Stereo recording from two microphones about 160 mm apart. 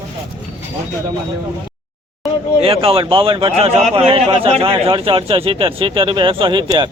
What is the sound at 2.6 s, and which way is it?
Speech, 35° right (ahead or behind).